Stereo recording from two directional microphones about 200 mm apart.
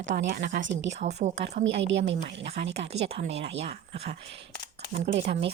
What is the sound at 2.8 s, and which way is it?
A woman's voice, 30° right (ahead or behind).